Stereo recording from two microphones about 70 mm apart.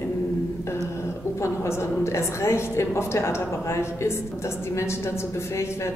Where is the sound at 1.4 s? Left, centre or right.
Left.